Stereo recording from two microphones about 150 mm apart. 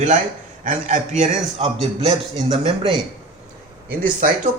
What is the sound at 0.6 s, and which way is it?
A man's voice, 60° right (ahead or behind).